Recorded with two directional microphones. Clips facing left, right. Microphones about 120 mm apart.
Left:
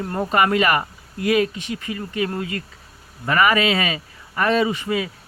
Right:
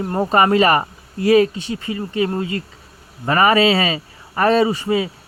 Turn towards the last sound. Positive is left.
turn(degrees=-30)  # may be behind; listen again after turning